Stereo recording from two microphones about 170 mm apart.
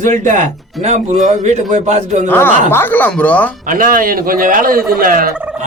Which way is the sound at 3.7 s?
55° right (ahead or behind).